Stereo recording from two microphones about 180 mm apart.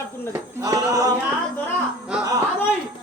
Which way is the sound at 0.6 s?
20° right (ahead or behind).